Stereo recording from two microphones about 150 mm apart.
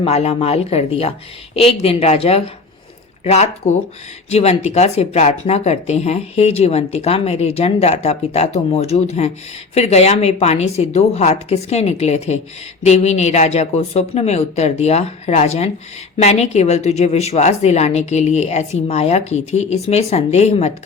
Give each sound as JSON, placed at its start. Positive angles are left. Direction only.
{"t": 0.0, "sound": "speech", "side_deg": 40}